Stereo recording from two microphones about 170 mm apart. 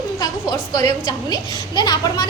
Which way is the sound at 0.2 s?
20° left (ahead or behind).